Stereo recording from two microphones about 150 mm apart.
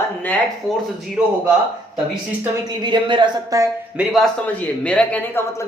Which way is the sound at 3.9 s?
Centre (ahead or behind).